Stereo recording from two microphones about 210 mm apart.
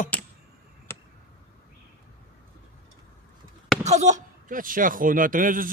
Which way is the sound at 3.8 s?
35° right (ahead or behind).